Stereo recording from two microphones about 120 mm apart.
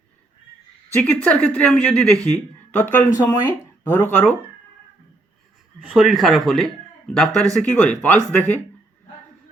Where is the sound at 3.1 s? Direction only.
30° left (ahead or behind).